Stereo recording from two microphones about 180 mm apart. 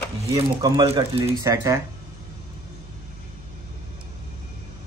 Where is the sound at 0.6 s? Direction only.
20° right (ahead or behind).